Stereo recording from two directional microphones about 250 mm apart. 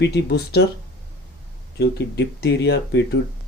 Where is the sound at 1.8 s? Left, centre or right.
Left.